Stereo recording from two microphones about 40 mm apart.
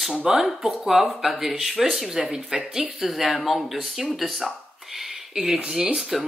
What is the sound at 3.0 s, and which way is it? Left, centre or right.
Speech, centre.